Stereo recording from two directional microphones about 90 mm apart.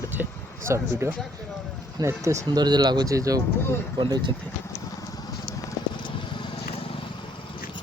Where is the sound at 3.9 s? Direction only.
60° right (ahead or behind).